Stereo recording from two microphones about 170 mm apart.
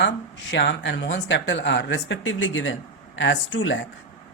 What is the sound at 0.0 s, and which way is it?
Speech, 90° left.